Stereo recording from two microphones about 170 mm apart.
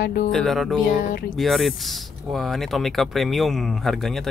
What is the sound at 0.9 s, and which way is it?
Speech, 55° left (ahead or behind).